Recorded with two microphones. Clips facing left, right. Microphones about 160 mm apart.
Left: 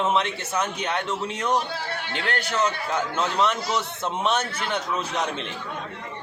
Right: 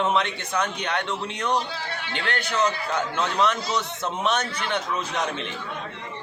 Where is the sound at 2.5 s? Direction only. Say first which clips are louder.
Right 1 dB; centre (ahead or behind).